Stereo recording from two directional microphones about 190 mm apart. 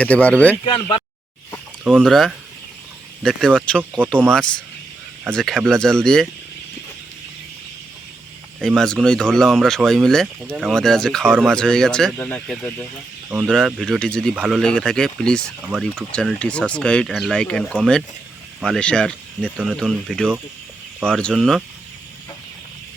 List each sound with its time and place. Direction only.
0.0 s speech: 5° left (ahead or behind)
0.6 s speech: 25° left (ahead or behind)
1.8 s speech: centre (ahead or behind)
5.3 s speech: centre (ahead or behind)
8.5 s speech: 5° left (ahead or behind)